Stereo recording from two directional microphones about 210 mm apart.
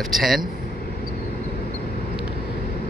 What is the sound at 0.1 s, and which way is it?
Speech, centre (ahead or behind).